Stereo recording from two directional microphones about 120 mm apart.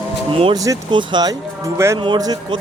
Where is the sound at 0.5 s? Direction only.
30° right (ahead or behind).